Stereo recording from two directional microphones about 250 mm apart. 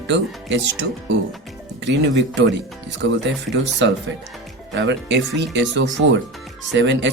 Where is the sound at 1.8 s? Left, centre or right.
Right.